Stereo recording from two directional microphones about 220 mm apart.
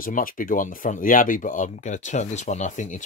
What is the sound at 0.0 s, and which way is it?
Speech, 40° left (ahead or behind).